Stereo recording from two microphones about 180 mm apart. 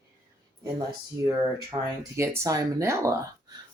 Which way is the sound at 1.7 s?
30° right (ahead or behind).